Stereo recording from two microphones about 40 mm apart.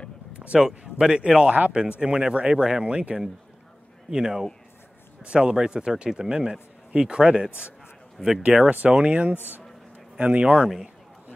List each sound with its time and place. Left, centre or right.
0.6 s a man's voice: centre
2.8 s a man's voice: right
4.1 s speech: centre
5.2 s a man's voice: right
8.2 s speech: centre
8.6 s speech: right
8.9 s a man's voice: right